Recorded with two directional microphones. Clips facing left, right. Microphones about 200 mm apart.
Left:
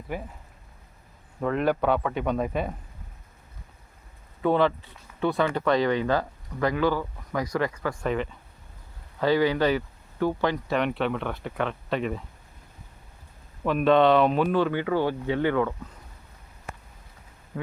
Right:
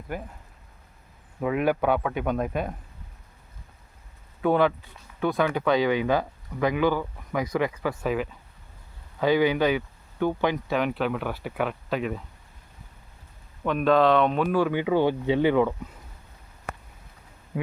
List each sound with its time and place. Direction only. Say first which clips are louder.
1.4 s speech: even; 5° right (ahead or behind)
4.4 s speech: right 1 dB; 5° right (ahead or behind)
9.2 s speech: right 1 dB; 15° right (ahead or behind)
9.6 s a sound: even; centre (ahead or behind)
10.7 s speech: even; centre (ahead or behind)
13.7 s speech: left 1 dB; centre (ahead or behind)
17.5 s speech: right 3 dB; 15° right (ahead or behind)